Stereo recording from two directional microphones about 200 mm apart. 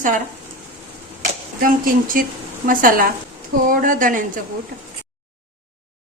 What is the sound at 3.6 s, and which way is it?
Female singing, 40° right (ahead or behind).